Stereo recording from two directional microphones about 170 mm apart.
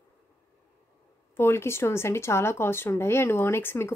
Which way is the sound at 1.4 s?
15° left (ahead or behind).